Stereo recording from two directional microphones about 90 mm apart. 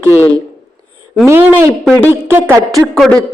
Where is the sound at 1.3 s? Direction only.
25° right (ahead or behind).